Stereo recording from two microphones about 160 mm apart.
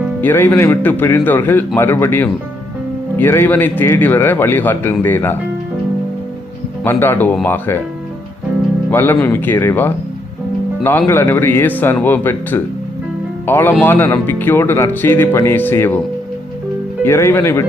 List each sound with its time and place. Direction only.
0.2 s speech: 10° left (ahead or behind)
6.8 s speech: 10° left (ahead or behind)
8.9 s speech: 10° left (ahead or behind)
11.0 s speech: 15° left (ahead or behind)
17.0 s speech: 15° left (ahead or behind)